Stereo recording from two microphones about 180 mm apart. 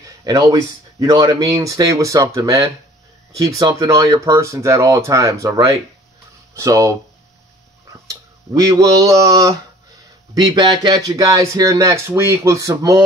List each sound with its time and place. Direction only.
0.2 s speech: 20° right (ahead or behind)
8.1 s tick: 20° right (ahead or behind)
10.3 s speech: 25° right (ahead or behind)